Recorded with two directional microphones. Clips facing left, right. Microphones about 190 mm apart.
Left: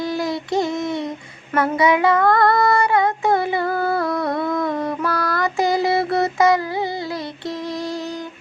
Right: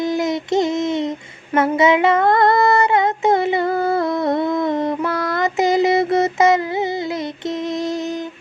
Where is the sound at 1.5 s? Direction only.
25° right (ahead or behind).